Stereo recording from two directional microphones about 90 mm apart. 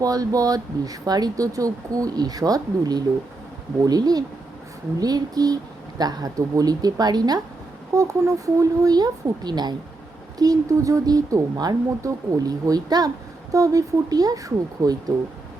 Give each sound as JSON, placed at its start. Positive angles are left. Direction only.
{"t": 0.0, "sound": "speech", "side_deg": -40}